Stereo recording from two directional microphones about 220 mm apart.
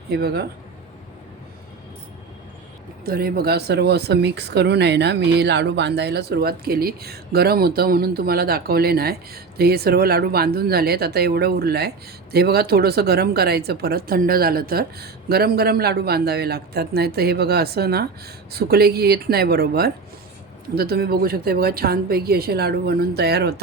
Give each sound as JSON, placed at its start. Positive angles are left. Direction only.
{"t": 0.1, "sound": "speech", "side_deg": -45}
{"t": 3.0, "sound": "speech", "side_deg": -45}